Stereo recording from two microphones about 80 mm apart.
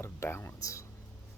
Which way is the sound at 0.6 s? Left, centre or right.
Left.